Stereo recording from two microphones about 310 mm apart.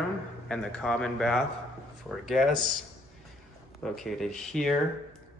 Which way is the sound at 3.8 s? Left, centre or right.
Centre.